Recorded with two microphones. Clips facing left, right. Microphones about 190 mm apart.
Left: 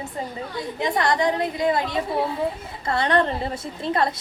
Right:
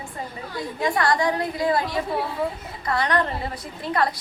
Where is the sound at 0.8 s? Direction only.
20° left (ahead or behind).